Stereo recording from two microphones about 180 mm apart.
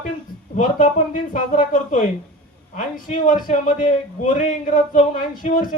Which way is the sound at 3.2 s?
45° left (ahead or behind).